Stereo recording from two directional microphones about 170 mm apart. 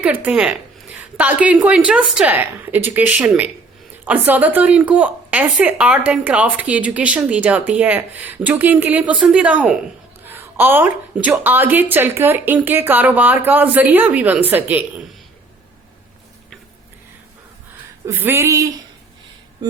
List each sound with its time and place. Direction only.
0.0 s speech: 10° right (ahead or behind)
18.0 s speech: 10° right (ahead or behind)